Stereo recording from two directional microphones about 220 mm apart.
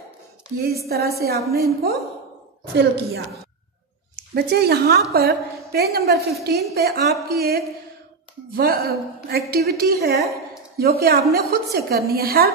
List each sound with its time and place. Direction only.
0.6 s a woman's voice: 45° right (ahead or behind)
4.3 s a woman's voice: 45° right (ahead or behind)